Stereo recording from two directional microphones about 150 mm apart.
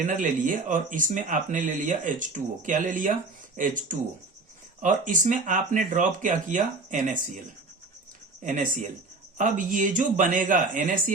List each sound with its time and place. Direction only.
0.0 s speech: 60° right (ahead or behind)
8.4 s speech: 55° right (ahead or behind)